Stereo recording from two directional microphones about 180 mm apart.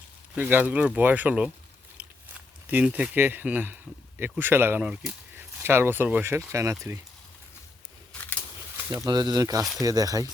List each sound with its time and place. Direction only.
0.3 s speech: 10° right (ahead or behind)
2.0 s a sound: 10° right (ahead or behind)
2.6 s speech: 10° right (ahead or behind)
9.0 s speech: 20° right (ahead or behind)